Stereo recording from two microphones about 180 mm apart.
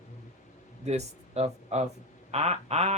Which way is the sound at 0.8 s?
40° right (ahead or behind).